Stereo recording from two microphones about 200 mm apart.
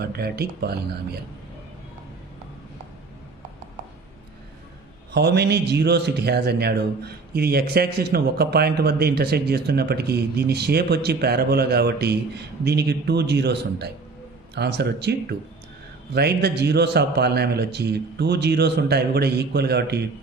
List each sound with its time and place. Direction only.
0.0 s speech: 50° right (ahead or behind)
5.1 s a man's voice: 55° right (ahead or behind)